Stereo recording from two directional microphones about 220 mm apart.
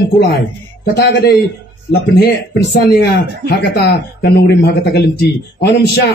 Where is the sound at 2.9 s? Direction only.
45° left (ahead or behind).